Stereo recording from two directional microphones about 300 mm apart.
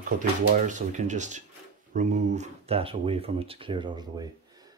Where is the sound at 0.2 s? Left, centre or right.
Right.